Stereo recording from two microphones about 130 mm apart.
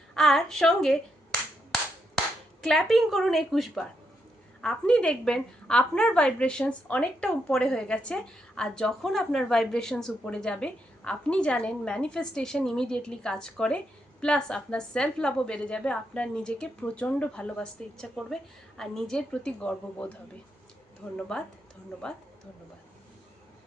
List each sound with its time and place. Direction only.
0.1 s a sound: 5° left (ahead or behind)
2.6 s a woman's voice: centre (ahead or behind)
21.2 s a woman's voice: 5° left (ahead or behind)